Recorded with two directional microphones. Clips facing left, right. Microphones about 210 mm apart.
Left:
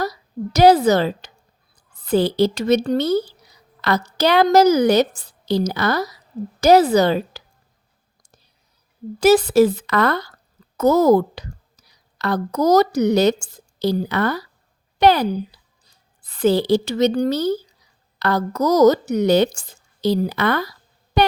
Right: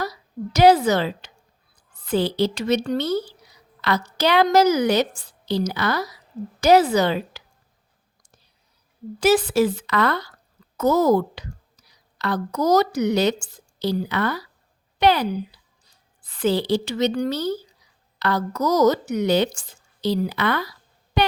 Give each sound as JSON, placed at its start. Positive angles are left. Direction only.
{"t": 0.0, "sound": "a woman's voice", "side_deg": 40}
{"t": 9.2, "sound": "a woman's voice", "side_deg": 40}
{"t": 21.2, "sound": "a sound", "side_deg": 40}